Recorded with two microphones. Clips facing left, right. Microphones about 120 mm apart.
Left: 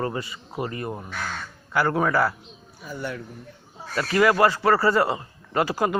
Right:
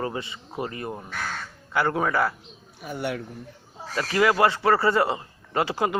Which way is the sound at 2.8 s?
70° right (ahead or behind).